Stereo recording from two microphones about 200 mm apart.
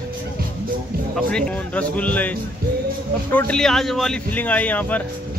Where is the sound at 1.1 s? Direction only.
5° left (ahead or behind).